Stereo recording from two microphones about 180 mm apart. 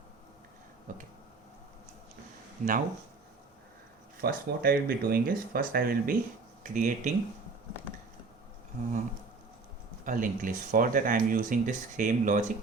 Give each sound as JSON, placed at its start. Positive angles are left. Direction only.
{"t": 0.9, "sound": "speech", "side_deg": -50}
{"t": 2.6, "sound": "speech", "side_deg": -45}
{"t": 4.2, "sound": "speech", "side_deg": -55}
{"t": 10.1, "sound": "speech", "side_deg": -45}